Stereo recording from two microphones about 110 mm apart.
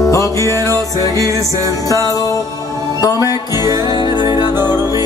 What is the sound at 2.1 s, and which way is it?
Music, 30° left (ahead or behind).